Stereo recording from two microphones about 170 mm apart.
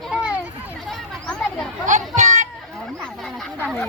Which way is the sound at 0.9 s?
5° left (ahead or behind).